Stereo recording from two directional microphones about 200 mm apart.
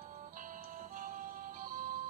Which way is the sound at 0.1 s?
40° right (ahead or behind).